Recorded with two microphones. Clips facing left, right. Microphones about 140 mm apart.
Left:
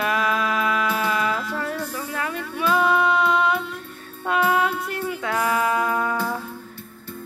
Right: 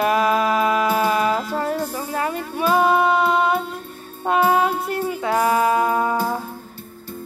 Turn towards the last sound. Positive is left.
turn(degrees=-35)  # may be behind; listen again after turning